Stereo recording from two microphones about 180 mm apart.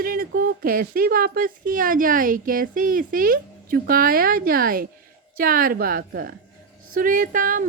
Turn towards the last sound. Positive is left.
turn(degrees=-50)  # may be behind; listen again after turning